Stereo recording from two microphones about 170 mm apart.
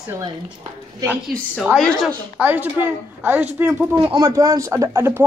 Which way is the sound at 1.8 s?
Centre (ahead or behind).